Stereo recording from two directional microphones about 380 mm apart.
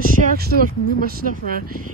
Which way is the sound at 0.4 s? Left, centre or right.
Right.